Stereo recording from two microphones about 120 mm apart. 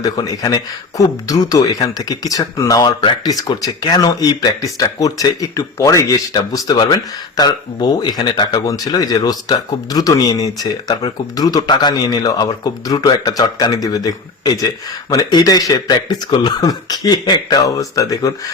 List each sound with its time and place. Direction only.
0.0 s speech: 30° left (ahead or behind)